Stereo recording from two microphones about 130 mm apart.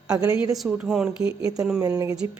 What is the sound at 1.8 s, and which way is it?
Speech, 25° right (ahead or behind).